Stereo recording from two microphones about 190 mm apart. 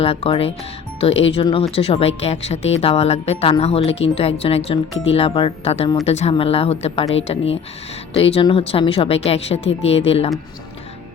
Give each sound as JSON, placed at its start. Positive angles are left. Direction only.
{"t": 0.0, "sound": "speech", "side_deg": 30}